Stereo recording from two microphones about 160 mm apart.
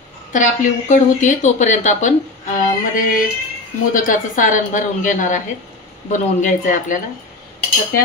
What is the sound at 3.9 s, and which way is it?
Speech, 55° left (ahead or behind).